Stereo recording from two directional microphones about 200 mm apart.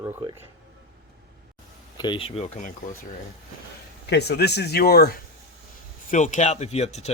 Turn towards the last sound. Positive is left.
turn(degrees=35)  # may be behind; listen again after turning